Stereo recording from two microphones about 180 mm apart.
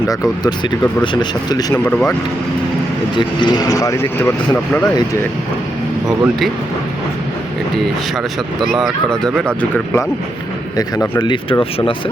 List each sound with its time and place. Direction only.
0.1 s speech: 20° left (ahead or behind)
1.8 s speech: 5° left (ahead or behind)
3.2 s speech: 25° left (ahead or behind)
6.1 s speech: centre (ahead or behind)
8.7 s speech: centre (ahead or behind); by 11.5 s 25° left (ahead or behind)